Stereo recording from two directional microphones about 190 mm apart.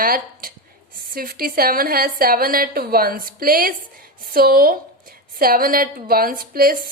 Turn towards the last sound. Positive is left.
turn(degrees=-50)  # may be behind; listen again after turning